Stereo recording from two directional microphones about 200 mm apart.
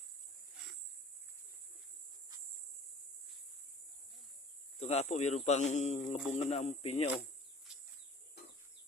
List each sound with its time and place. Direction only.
4.8 s speech: 30° left (ahead or behind)
7.7 s bird: 5° right (ahead or behind)